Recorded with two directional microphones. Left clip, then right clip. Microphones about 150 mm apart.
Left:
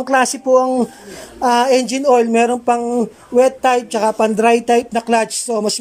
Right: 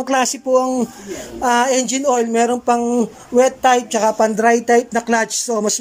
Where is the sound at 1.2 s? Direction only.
10° left (ahead or behind).